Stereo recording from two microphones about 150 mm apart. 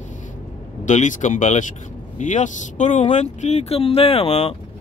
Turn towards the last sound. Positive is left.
turn(degrees=40)  # may be behind; listen again after turning